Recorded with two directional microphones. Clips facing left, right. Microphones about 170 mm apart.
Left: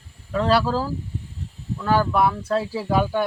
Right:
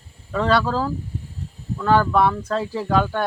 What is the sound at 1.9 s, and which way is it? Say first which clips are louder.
Speech: right 2 dB; 10° left (ahead or behind).